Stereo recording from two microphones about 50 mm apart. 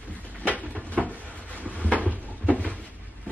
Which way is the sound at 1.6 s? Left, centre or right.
Right.